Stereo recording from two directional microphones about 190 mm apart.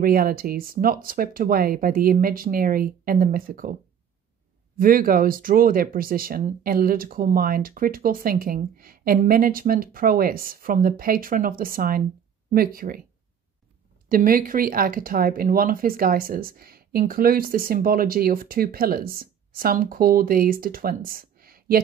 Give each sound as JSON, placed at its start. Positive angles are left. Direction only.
{"t": 0.0, "sound": "speech", "side_deg": -50}
{"t": 4.7, "sound": "speech", "side_deg": -50}
{"t": 14.0, "sound": "speech", "side_deg": -50}